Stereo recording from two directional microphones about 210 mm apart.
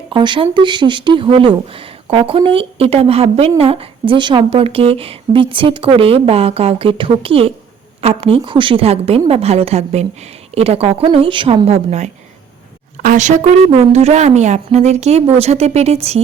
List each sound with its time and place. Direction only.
0.1 s a woman's voice: 25° right (ahead or behind)